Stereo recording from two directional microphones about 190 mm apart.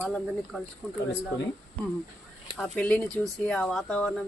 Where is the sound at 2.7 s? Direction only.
5° left (ahead or behind).